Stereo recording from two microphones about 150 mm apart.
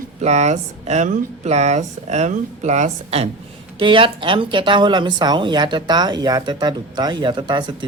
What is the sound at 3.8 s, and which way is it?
A woman's voice, 35° right (ahead or behind).